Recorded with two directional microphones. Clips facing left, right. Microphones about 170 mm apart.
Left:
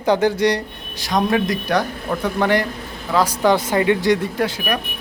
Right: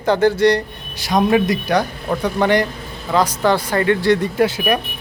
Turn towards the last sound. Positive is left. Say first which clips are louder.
# right 5 dB
turn(degrees=-5)  # may be behind; listen again after turning